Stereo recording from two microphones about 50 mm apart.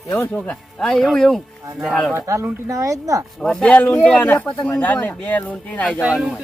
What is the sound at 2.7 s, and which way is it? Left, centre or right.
Speech, right.